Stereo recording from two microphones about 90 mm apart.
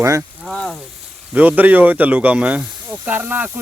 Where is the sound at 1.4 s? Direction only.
20° right (ahead or behind).